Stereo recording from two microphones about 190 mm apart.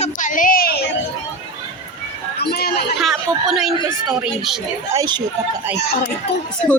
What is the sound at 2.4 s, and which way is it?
Chatter, 55° left (ahead or behind).